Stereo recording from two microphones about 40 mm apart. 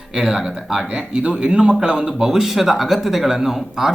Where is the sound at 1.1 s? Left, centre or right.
Right.